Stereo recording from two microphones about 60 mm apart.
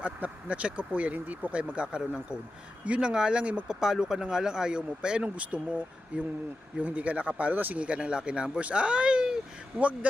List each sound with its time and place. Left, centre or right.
0.0 s speech: right